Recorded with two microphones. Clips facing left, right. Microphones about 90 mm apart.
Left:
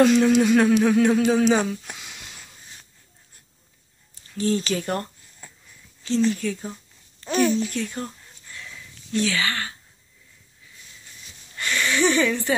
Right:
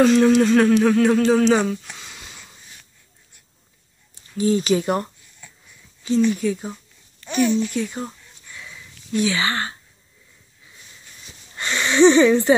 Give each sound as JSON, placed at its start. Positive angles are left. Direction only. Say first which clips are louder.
{"t": 0.0, "sound": "speech", "louder": "right 2 dB", "side_deg": 0}
{"t": 1.9, "sound": "a sound", "louder": "even", "side_deg": 5}
{"t": 4.4, "sound": "speech", "louder": "right 5 dB", "side_deg": -10}
{"t": 5.4, "sound": "wheeze", "louder": "left 1 dB", "side_deg": 40}
{"t": 6.3, "sound": "speech", "louder": "right 5 dB", "side_deg": -10}
{"t": 9.1, "sound": "speech", "louder": "right 3 dB", "side_deg": -15}
{"t": 11.5, "sound": "speech", "louder": "right 4 dB", "side_deg": -20}